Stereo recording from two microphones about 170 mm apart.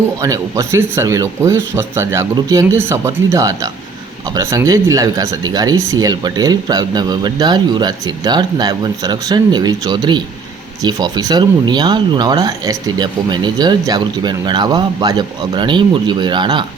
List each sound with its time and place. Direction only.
0.2 s speech: 20° right (ahead or behind)